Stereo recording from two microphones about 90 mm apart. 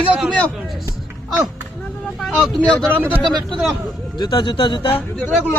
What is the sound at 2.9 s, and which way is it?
Speech, 20° right (ahead or behind).